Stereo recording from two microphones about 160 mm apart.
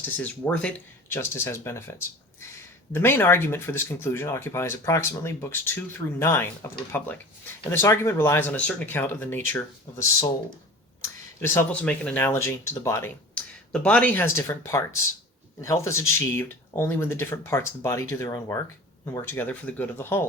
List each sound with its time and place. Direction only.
0.0 s speech: 10° left (ahead or behind)
11.3 s speech: 15° left (ahead or behind)